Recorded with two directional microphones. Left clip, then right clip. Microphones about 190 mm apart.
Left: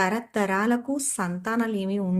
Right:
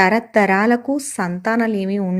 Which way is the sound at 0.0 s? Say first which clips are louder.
Right 10 dB; 30° right (ahead or behind).